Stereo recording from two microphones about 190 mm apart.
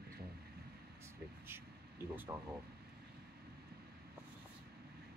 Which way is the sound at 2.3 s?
10° right (ahead or behind).